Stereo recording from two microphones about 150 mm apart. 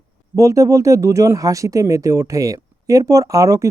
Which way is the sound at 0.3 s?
20° right (ahead or behind).